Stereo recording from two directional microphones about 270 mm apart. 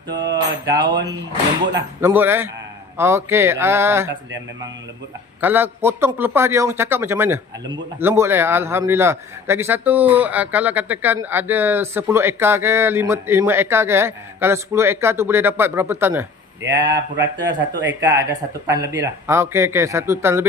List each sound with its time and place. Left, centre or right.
0.6 s a man's voice: centre
5.4 s a man's voice: centre
16.8 s speech: right
18.2 s a man's voice: centre